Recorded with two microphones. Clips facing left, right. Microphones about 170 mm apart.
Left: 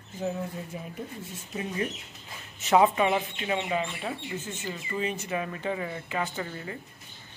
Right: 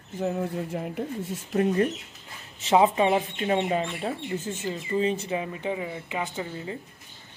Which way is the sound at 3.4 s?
40° right (ahead or behind).